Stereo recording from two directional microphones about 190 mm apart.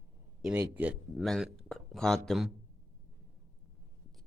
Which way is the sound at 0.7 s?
10° right (ahead or behind).